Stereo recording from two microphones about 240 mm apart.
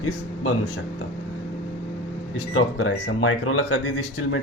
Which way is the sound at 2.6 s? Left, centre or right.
Left.